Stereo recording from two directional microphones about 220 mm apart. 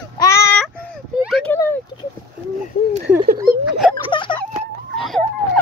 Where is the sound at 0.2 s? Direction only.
15° left (ahead or behind).